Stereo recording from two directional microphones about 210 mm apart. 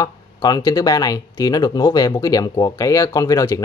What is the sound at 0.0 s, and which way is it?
Speech, 20° left (ahead or behind).